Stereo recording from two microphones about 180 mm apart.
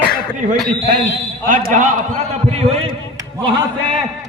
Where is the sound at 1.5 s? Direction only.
45° right (ahead or behind).